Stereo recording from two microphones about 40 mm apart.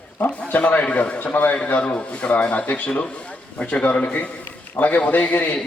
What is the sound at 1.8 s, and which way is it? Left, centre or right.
A man's voice, left.